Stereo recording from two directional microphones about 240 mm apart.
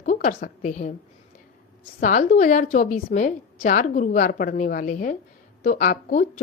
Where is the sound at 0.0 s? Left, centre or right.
Left.